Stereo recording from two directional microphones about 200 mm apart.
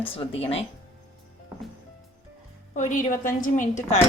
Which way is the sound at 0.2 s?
30° left (ahead or behind).